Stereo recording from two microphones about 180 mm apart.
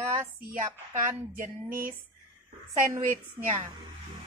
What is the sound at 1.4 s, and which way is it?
Music, 50° right (ahead or behind).